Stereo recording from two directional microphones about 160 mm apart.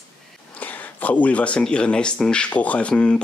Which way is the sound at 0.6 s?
10° left (ahead or behind).